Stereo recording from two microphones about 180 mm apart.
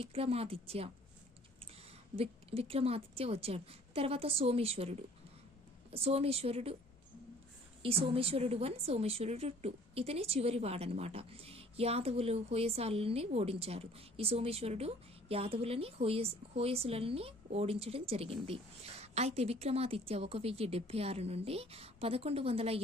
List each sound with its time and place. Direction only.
0.0 s a woman's voice: 35° right (ahead or behind)
2.1 s a woman's voice: 30° right (ahead or behind)
7.8 s a woman's voice: 30° right (ahead or behind)